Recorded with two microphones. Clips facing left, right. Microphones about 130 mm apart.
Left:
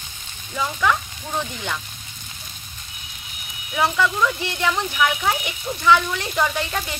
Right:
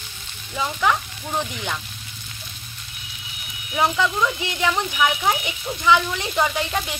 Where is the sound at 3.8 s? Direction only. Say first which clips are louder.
Even; 15° right (ahead or behind).